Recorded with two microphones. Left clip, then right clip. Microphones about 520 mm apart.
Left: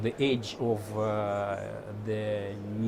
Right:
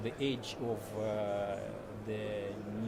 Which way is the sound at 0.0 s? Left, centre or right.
Left.